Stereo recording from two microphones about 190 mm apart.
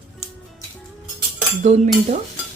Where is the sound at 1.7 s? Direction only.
35° right (ahead or behind).